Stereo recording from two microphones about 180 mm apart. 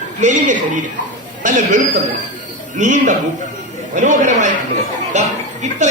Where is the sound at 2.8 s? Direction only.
40° right (ahead or behind).